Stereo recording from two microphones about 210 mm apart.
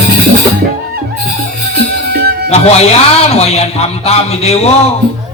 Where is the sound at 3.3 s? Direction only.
30° left (ahead or behind).